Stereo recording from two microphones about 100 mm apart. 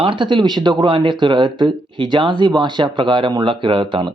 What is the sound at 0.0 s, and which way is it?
Speech, 55° right (ahead or behind).